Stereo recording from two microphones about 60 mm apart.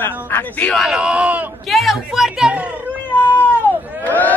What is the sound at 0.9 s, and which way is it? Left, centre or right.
Speech, centre.